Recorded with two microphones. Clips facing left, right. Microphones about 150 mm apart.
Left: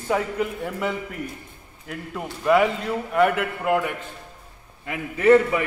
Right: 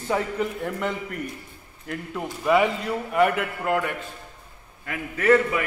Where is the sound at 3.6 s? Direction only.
10° left (ahead or behind).